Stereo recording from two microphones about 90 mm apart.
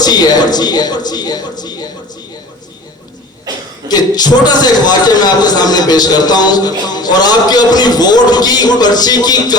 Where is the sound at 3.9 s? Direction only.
50° left (ahead or behind).